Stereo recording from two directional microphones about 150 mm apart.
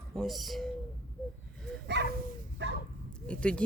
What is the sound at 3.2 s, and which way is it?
Speech, 5° left (ahead or behind).